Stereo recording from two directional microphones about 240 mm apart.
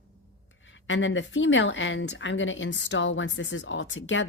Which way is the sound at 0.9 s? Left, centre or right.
Left.